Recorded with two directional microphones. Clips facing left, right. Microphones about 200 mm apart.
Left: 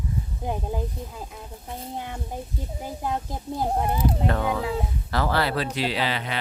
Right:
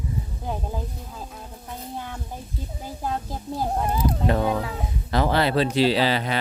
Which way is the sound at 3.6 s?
20° left (ahead or behind).